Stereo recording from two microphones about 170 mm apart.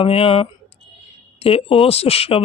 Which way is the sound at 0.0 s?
35° left (ahead or behind).